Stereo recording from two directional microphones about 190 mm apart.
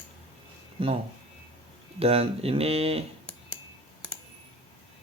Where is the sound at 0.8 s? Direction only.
30° right (ahead or behind).